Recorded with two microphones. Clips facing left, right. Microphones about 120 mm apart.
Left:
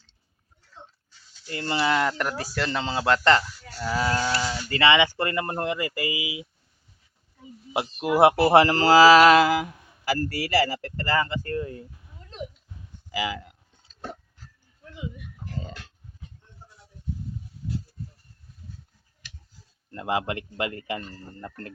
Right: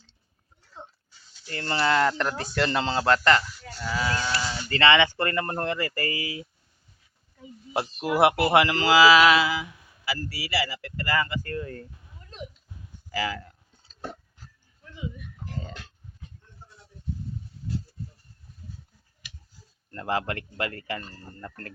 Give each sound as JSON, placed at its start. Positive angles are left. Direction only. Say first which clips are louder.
{"t": 1.5, "sound": "speech", "louder": "even", "side_deg": 15}
{"t": 3.8, "sound": "speech", "louder": "left 3 dB", "side_deg": 30}
{"t": 4.7, "sound": "speech", "louder": "even", "side_deg": 15}
{"t": 7.9, "sound": "mantra", "louder": "left 3 dB", "side_deg": 25}
{"t": 13.1, "sound": "speech", "louder": "even", "side_deg": 15}
{"t": 19.9, "sound": "speech", "louder": "left 1 dB", "side_deg": 15}